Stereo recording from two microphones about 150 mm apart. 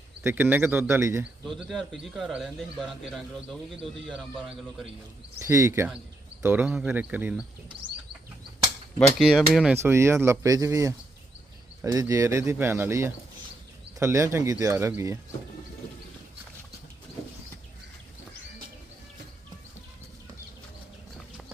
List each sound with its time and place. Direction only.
0.3 s speech: 15° right (ahead or behind)
1.5 s speech: centre (ahead or behind)
5.4 s speech: 20° right (ahead or behind)
9.1 s speech: centre (ahead or behind)
9.7 s speech: 15° right (ahead or behind)